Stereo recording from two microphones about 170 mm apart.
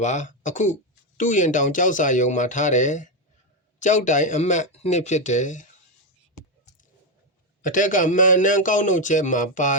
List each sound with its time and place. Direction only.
0.0 s speech: 45° left (ahead or behind)
7.6 s speech: 50° left (ahead or behind)